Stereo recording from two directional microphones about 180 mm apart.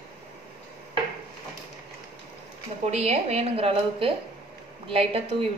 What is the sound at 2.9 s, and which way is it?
A woman's voice, 35° right (ahead or behind).